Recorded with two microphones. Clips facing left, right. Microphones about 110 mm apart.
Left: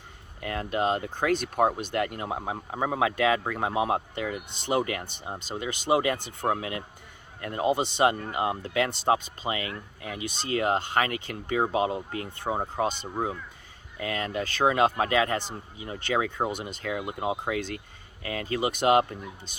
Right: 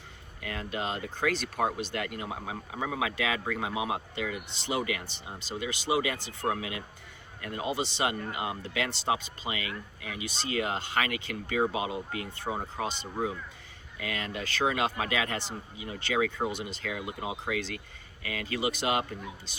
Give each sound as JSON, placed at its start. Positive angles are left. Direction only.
{"t": 0.4, "sound": "speech", "side_deg": 40}
{"t": 6.5, "sound": "speech", "side_deg": 40}
{"t": 14.0, "sound": "speech", "side_deg": 35}
{"t": 18.2, "sound": "speech", "side_deg": 35}